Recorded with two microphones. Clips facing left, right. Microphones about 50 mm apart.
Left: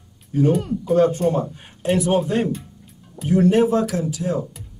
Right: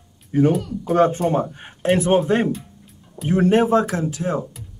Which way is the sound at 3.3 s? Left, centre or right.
Right.